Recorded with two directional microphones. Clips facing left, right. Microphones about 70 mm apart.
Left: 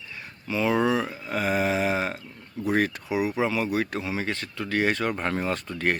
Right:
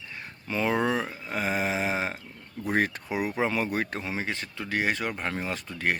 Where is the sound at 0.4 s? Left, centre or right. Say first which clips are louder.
Left 2 dB; right.